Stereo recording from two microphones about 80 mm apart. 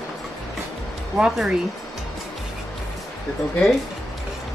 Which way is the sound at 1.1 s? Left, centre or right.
Centre.